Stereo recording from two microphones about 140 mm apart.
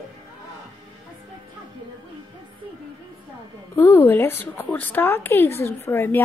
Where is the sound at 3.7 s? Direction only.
15° left (ahead or behind).